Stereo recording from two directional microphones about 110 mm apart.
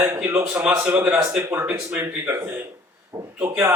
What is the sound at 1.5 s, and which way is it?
A man's voice, 25° right (ahead or behind).